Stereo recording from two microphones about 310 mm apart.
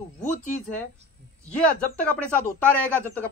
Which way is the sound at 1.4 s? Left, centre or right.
Centre.